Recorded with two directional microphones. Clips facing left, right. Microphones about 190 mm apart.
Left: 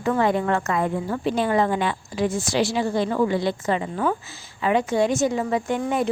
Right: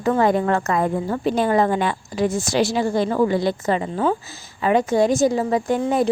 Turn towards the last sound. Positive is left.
turn(degrees=-40)  # may be behind; listen again after turning